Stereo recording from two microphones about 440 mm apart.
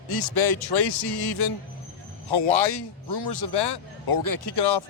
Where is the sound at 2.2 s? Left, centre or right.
Left.